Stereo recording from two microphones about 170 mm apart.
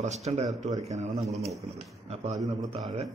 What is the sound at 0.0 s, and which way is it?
A man's voice, 40° right (ahead or behind).